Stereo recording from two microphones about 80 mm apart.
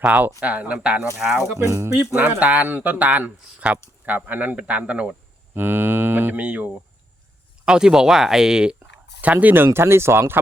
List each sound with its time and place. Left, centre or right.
0.0 s speech: centre
1.5 s speech: right
2.1 s speech: centre
5.5 s speech: right; by 8.7 s centre
9.2 s speech: centre